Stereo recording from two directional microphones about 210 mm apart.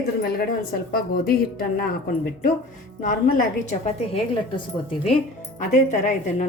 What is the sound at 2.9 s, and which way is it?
Speech, 40° left (ahead or behind).